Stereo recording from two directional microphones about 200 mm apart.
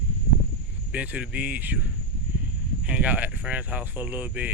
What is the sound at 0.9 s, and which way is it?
Speech, 5° right (ahead or behind).